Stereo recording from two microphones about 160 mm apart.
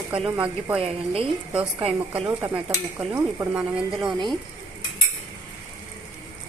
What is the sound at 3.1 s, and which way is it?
Speech, 15° right (ahead or behind).